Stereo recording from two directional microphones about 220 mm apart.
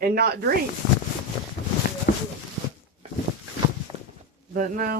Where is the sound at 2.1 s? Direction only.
50° left (ahead or behind).